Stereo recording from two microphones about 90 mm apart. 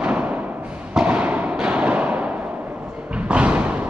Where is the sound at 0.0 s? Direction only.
15° right (ahead or behind).